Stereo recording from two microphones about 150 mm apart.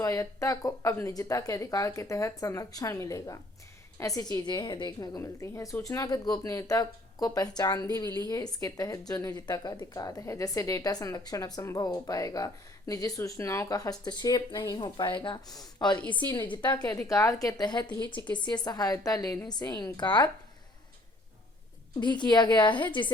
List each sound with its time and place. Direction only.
0.0 s a woman's voice: 20° left (ahead or behind)
16.0 s a woman's voice: 10° left (ahead or behind)
17.1 s a woman's voice: 20° left (ahead or behind)
22.0 s a woman's voice: 30° left (ahead or behind)